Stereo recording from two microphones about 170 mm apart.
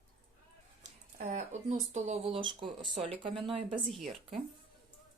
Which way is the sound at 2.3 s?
30° right (ahead or behind).